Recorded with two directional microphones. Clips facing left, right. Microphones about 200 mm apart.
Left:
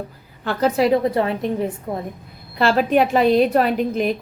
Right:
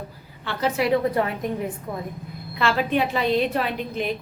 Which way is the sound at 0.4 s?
35° left (ahead or behind).